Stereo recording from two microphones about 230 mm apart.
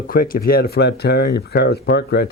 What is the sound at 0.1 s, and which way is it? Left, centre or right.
Speech, left.